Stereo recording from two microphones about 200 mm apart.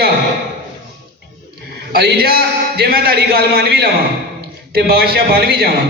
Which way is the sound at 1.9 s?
50° right (ahead or behind).